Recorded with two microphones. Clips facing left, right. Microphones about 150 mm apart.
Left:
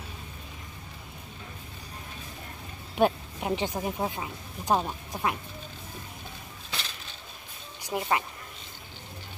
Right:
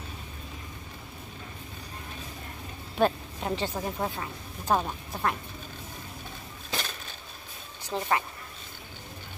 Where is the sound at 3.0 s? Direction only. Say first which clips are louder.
Left 1 dB; 10° left (ahead or behind).